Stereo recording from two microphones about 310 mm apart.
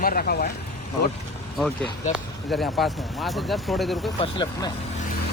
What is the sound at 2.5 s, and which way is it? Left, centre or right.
Speech, centre.